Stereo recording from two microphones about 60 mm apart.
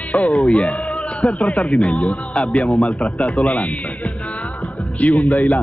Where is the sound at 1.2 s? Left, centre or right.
Left.